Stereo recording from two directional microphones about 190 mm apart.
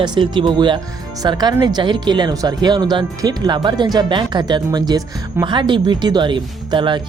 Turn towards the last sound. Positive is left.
turn(degrees=-25)  # may be behind; listen again after turning